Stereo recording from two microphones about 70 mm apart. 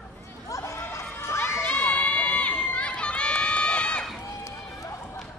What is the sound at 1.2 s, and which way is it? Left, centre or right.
Crowd, left.